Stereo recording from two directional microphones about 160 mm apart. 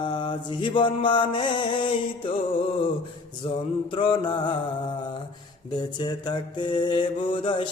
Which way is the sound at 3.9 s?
30° left (ahead or behind).